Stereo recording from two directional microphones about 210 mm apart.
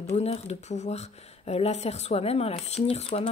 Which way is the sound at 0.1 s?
30° left (ahead or behind).